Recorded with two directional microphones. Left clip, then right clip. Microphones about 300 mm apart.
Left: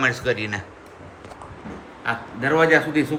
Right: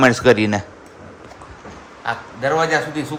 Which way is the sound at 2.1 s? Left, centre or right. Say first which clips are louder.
Right 2 dB; centre.